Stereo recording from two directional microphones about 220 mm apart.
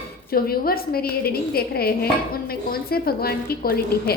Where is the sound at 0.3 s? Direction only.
45° left (ahead or behind).